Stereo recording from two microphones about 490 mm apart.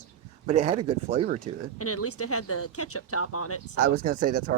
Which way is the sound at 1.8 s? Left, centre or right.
Left.